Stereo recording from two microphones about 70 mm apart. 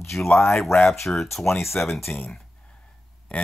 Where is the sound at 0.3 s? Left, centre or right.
Left.